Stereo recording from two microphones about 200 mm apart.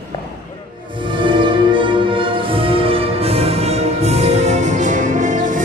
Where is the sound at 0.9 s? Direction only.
25° right (ahead or behind).